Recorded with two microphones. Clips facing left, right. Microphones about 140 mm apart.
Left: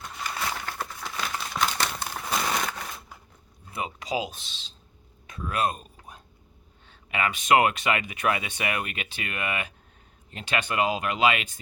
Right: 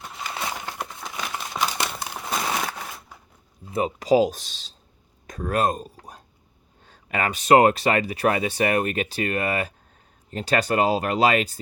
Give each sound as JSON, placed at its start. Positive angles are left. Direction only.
{"t": 0.3, "sound": "crumpling", "side_deg": -20}
{"t": 2.6, "sound": "crushing", "side_deg": -5}
{"t": 3.7, "sound": "speech", "side_deg": -35}
{"t": 5.2, "sound": "a sound", "side_deg": -45}
{"t": 6.8, "sound": "speech", "side_deg": -40}